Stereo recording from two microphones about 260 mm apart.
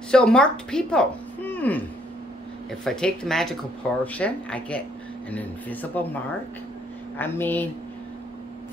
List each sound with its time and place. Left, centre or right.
0.1 s speech: centre
2.8 s speech: centre
7.2 s speech: centre